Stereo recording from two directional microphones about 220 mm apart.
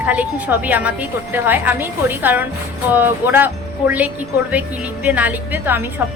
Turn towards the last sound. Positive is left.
turn(degrees=-10)  # may be behind; listen again after turning